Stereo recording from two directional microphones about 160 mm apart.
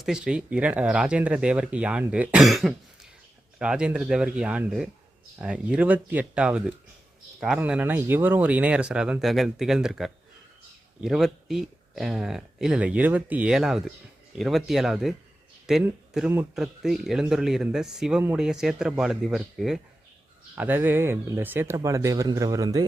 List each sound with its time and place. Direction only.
0.0 s speech: 5° right (ahead or behind); by 22.9 s 20° right (ahead or behind)